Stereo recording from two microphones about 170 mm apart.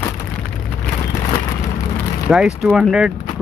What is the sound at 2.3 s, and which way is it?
Speech, 5° right (ahead or behind).